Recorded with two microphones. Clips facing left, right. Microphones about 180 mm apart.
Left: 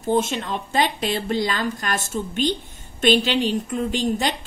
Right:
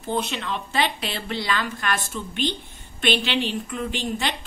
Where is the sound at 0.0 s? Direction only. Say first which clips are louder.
Left 5 dB; 45° left (ahead or behind).